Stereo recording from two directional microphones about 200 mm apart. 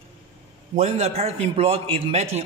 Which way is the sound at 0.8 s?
30° right (ahead or behind).